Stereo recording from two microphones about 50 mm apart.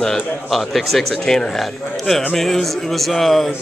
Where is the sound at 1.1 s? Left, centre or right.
Centre.